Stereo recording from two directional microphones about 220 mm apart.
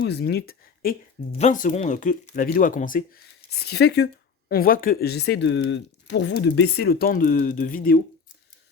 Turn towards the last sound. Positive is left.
turn(degrees=40)  # may be behind; listen again after turning